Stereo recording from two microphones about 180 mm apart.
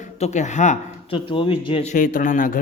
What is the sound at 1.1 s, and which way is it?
Speech, 30° left (ahead or behind).